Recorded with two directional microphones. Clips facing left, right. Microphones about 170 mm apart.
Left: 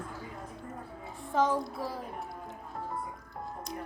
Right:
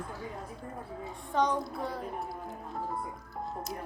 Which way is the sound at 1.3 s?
5° left (ahead or behind).